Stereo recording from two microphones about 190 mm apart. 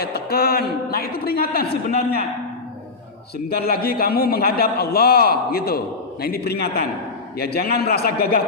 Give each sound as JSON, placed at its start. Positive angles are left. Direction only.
{"t": 0.0, "sound": "a woman's voice", "side_deg": 55}
{"t": 3.5, "sound": "a man's voice", "side_deg": 55}